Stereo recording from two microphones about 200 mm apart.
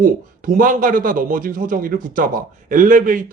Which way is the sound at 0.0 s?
45° right (ahead or behind).